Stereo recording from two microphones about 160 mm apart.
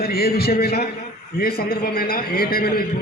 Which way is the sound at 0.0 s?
70° left (ahead or behind).